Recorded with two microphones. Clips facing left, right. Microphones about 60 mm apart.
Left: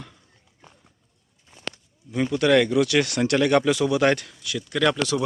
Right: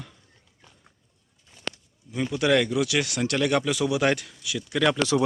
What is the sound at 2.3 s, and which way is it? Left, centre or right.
Speech, centre.